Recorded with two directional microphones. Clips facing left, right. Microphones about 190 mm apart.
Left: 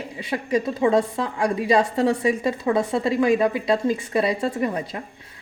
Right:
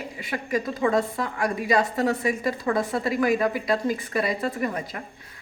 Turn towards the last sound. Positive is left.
turn(degrees=30)  # may be behind; listen again after turning